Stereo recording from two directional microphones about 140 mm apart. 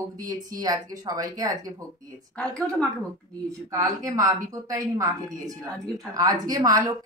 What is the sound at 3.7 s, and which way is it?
A woman's voice, 25° right (ahead or behind).